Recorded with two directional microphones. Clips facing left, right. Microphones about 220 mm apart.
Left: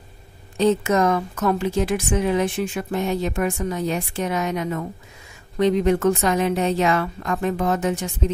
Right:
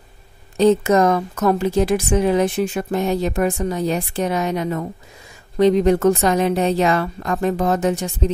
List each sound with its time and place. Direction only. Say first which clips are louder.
0.6 s a woman's voice: right 4 dB; 40° right (ahead or behind)